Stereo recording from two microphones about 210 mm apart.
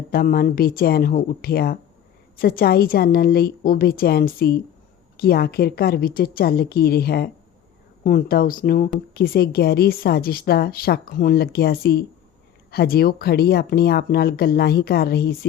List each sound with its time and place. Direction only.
0.1 s speech: 45° left (ahead or behind)